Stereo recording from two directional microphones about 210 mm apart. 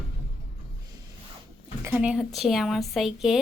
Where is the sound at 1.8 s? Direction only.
5° right (ahead or behind).